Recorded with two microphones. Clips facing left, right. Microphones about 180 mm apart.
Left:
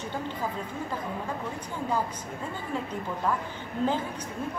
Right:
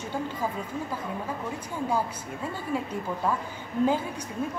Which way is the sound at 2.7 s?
10° right (ahead or behind).